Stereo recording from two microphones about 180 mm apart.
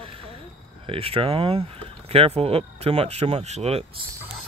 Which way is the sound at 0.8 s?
30° right (ahead or behind).